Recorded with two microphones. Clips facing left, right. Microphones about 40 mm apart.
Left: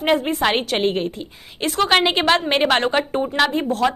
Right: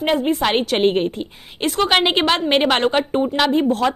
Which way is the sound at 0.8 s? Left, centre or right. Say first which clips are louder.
Right 4 dB; right.